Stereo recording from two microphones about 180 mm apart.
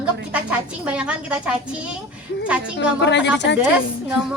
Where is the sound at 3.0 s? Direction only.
80° left.